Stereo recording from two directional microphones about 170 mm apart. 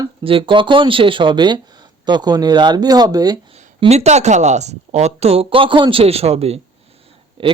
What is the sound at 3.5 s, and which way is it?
A woman's voice, 40° right (ahead or behind).